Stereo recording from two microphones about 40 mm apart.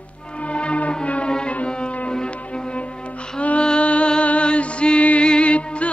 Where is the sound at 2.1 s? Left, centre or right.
Left.